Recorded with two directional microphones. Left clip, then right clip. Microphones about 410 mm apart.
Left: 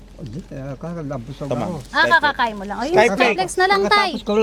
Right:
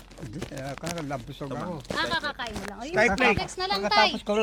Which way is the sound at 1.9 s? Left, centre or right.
Left.